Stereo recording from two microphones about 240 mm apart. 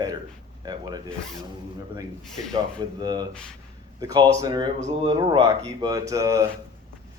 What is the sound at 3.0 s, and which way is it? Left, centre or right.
Speech, centre.